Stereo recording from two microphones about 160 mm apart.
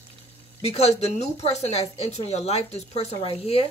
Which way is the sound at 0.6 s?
40° left (ahead or behind).